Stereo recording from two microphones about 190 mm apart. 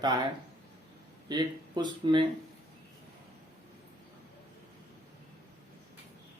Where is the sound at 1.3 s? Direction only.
20° right (ahead or behind).